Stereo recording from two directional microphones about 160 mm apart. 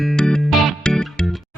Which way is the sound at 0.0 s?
Centre (ahead or behind).